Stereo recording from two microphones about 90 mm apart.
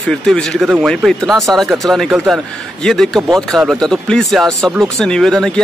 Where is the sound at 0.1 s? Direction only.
5° left (ahead or behind).